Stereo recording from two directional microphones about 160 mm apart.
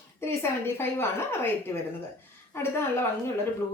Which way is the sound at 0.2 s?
15° left (ahead or behind).